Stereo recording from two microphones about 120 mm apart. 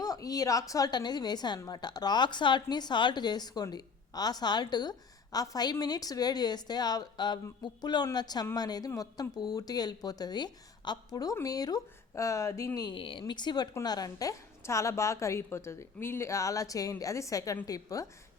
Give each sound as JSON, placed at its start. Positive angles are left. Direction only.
{"t": 0.0, "sound": "a woman's voice", "side_deg": 30}
{"t": 13.0, "sound": "a woman's voice", "side_deg": 45}